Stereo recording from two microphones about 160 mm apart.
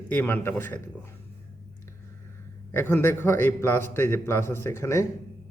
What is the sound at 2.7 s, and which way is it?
A man's voice, 15° left (ahead or behind).